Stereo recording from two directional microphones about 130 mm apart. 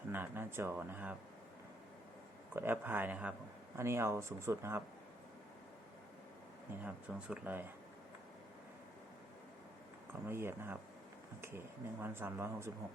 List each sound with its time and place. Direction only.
0.1 s speech: 15° right (ahead or behind)
2.5 s speech: 15° right (ahead or behind)
6.8 s speech: 10° right (ahead or behind)
10.1 s speech: 15° right (ahead or behind)